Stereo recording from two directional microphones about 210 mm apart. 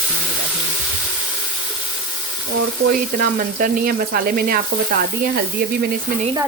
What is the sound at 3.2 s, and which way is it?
Speech, 40° right (ahead or behind).